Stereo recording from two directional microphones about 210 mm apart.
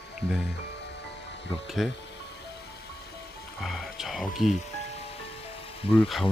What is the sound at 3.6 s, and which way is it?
Speech, centre (ahead or behind).